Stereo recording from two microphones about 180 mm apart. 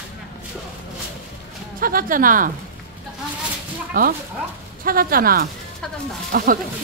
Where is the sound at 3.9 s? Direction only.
50° right (ahead or behind).